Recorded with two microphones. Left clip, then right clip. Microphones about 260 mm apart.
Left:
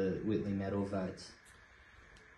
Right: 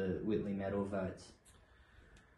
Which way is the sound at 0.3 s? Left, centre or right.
Left.